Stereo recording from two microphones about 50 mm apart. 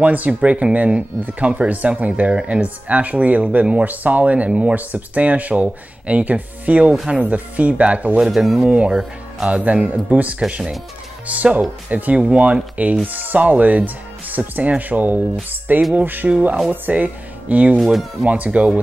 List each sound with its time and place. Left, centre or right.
0.0 s speech: right
4.5 s speech: centre
4.7 s speech: right
8.2 s speech: centre
8.6 s speech: right
8.9 s speech: centre
9.6 s speech: right